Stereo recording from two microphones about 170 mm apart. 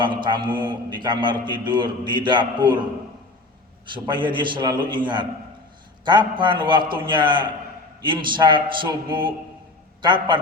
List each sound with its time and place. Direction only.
0.0 s a man's voice: 30° right (ahead or behind)
3.8 s a man's voice: 30° right (ahead or behind)